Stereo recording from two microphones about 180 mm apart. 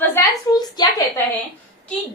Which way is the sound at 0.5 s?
20° left (ahead or behind).